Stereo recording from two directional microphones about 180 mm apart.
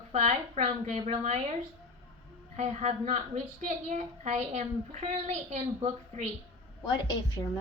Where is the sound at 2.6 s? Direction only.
40° right (ahead or behind).